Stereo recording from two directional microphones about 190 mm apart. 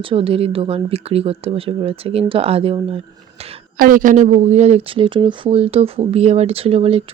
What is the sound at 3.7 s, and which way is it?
Speech, 45° right (ahead or behind).